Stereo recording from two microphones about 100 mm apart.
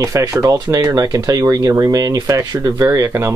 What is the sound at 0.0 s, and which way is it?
Speech, 30° right (ahead or behind).